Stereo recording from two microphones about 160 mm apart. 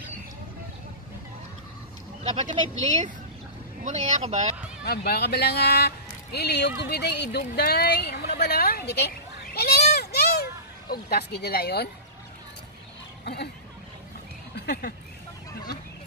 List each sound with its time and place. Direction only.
2.2 s speech: 45° right (ahead or behind)
4.8 s speech: 80° left
9.5 s sheep: 75° left (ahead or behind)
13.2 s speech: 90° left
14.5 s speech: 80° left